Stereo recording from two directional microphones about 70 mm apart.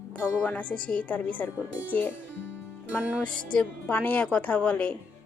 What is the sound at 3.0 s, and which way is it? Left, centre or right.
Music, centre.